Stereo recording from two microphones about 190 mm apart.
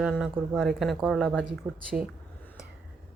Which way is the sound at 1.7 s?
15° right (ahead or behind).